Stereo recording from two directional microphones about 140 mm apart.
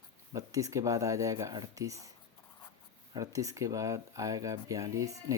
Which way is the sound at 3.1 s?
25° right (ahead or behind).